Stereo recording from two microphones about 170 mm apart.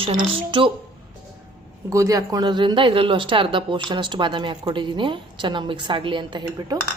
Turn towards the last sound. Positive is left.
turn(degrees=-30)  # may be behind; listen again after turning